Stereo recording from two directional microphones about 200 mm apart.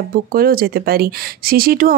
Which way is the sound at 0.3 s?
50° right (ahead or behind).